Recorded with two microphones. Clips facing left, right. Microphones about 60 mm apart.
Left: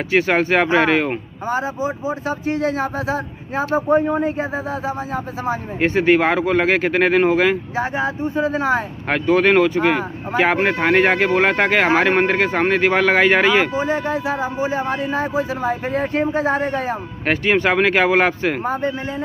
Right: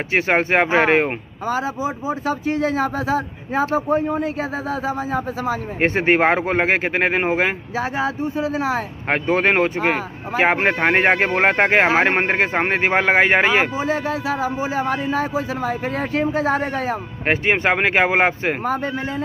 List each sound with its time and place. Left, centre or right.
0.1 s speech: right
3.9 s speech: left
5.8 s speech: right
9.1 s speech: right
14.1 s speech: left
17.3 s speech: right